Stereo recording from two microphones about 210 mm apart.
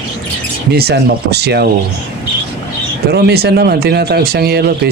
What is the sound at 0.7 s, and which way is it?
Speech, 50° right (ahead or behind).